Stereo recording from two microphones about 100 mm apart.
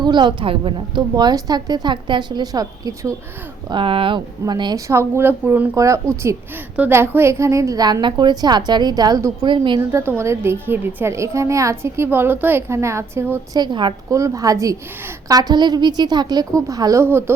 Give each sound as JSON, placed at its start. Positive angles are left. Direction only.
{"t": 0.0, "sound": "speech", "side_deg": -50}
{"t": 1.1, "sound": "a woman's voice", "side_deg": -40}
{"t": 3.7, "sound": "speech", "side_deg": -60}
{"t": 4.9, "sound": "a woman's voice", "side_deg": -25}
{"t": 6.7, "sound": "a woman's voice", "side_deg": -20}
{"t": 9.5, "sound": "speech", "side_deg": -50}
{"t": 9.9, "sound": "a woman's voice", "side_deg": -25}
{"t": 13.5, "sound": "speech", "side_deg": -45}
{"t": 14.1, "sound": "a woman's voice", "side_deg": -30}
{"t": 17.0, "sound": "a woman's voice", "side_deg": -25}